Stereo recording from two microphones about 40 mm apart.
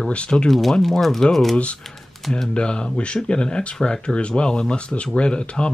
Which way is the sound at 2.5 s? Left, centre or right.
Left.